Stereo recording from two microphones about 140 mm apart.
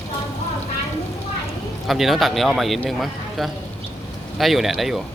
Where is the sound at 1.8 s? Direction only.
Centre (ahead or behind).